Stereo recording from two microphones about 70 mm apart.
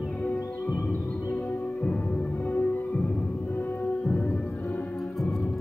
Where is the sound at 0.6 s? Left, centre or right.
Left.